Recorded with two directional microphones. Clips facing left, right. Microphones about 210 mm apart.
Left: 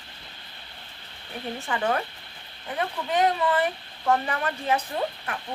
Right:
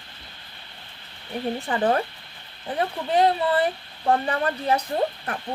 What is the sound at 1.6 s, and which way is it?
Speech, 35° right (ahead or behind).